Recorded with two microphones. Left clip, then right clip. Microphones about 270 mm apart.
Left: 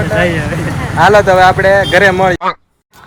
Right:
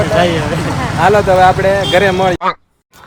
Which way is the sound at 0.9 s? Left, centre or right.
Centre.